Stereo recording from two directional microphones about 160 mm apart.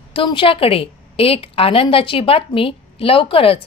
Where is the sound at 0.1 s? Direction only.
35° left (ahead or behind).